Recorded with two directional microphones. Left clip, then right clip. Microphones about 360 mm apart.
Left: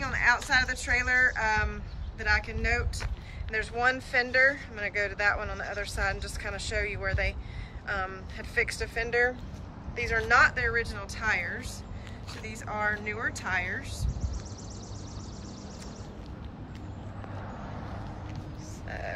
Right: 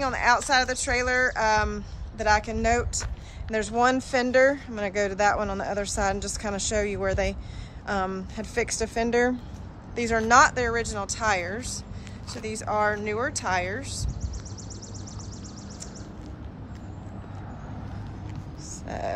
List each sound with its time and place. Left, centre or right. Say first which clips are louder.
0.0 s a woman's voice: right 3 dB; centre
5.6 s speech: right 6 dB; right
6.0 s a woman's voice: right 5 dB; centre
10.3 s speech: right 4 dB; centre
18.9 s music: right 6 dB; centre